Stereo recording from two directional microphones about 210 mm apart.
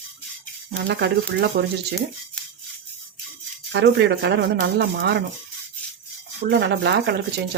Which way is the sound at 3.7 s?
55° right (ahead or behind).